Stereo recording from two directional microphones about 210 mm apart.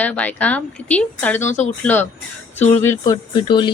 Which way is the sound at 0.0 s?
5° left (ahead or behind).